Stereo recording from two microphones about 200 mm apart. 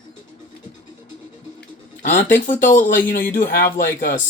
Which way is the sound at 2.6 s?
40° left (ahead or behind).